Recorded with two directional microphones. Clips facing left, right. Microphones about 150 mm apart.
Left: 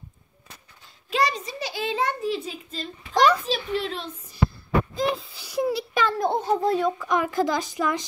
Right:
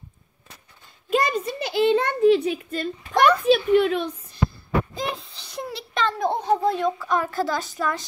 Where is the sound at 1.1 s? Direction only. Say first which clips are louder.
Right 3 dB; 50° right (ahead or behind).